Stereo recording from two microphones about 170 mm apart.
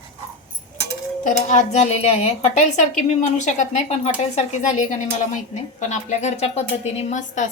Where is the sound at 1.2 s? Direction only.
45° left (ahead or behind).